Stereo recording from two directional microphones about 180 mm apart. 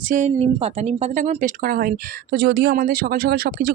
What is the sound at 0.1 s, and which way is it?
Speech, 40° right (ahead or behind).